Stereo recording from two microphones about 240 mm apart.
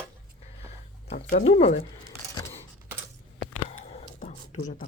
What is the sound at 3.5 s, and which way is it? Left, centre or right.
Whispering, left.